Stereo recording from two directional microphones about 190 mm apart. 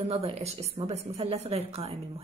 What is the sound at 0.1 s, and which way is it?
A woman's voice, 35° right (ahead or behind).